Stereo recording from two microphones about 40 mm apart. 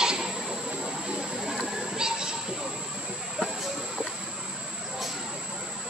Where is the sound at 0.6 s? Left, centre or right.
Right.